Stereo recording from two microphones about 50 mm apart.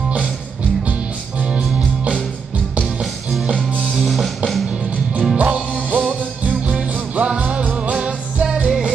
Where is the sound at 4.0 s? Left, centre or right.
Centre.